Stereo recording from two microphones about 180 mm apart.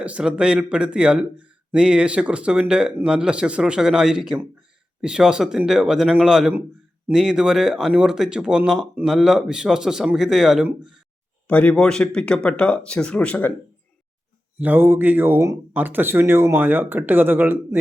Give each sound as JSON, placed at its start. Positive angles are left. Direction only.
{"t": 0.0, "sound": "speech", "side_deg": -5}
{"t": 11.4, "sound": "speech", "side_deg": 5}
{"t": 14.6, "sound": "speech", "side_deg": -10}